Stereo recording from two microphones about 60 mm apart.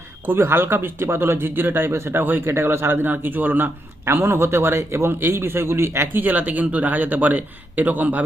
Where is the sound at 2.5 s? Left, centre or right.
Right.